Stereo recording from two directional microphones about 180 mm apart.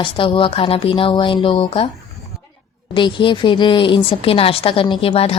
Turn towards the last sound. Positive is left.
turn(degrees=30)  # may be behind; listen again after turning